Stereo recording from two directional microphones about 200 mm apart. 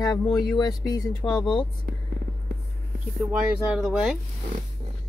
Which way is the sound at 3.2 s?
5° right (ahead or behind).